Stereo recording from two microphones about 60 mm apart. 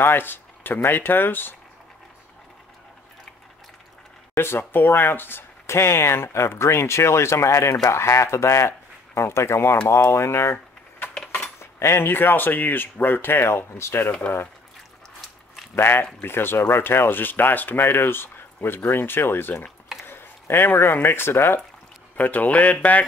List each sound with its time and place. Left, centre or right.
0.0 s speech: left
4.4 s speech: left
11.6 s speech: left
15.7 s speech: left
22.1 s speech: left